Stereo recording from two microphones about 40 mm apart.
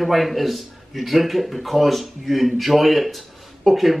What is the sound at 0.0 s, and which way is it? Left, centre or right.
A man's voice, centre.